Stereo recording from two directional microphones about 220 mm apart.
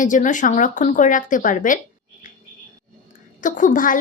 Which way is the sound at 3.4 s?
35° left (ahead or behind).